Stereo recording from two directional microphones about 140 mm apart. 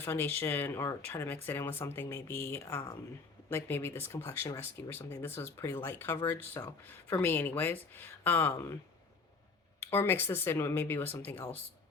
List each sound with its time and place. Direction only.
0.0 s speech: 15° left (ahead or behind)
9.9 s speech: 15° left (ahead or behind)